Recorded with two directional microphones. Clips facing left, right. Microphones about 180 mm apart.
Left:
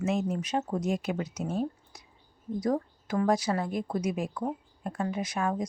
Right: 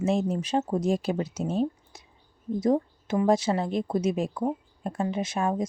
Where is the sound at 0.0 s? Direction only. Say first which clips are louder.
Right 3 dB; 30° right (ahead or behind).